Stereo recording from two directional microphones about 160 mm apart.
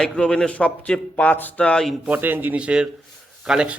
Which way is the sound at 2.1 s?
10° right (ahead or behind).